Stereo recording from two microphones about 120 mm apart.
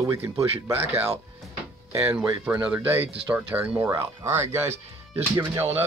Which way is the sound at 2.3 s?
25° right (ahead or behind).